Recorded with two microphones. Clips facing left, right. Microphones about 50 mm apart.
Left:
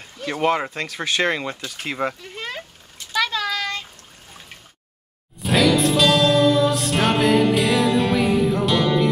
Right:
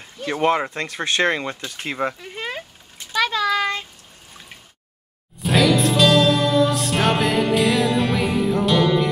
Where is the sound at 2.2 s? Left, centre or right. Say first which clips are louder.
Right 2 dB; centre.